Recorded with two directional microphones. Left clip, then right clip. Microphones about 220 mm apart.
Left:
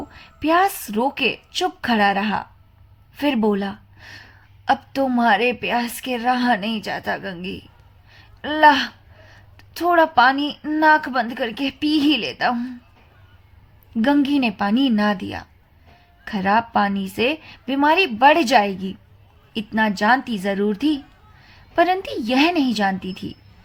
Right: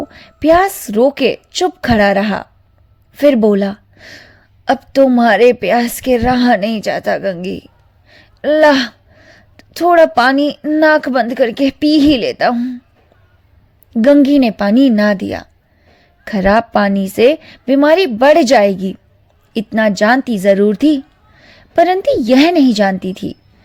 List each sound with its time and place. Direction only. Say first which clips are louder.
0.1 s a woman's voice: right 9 dB; 35° right (ahead or behind)
13.9 s a woman's voice: right 10 dB; 30° right (ahead or behind)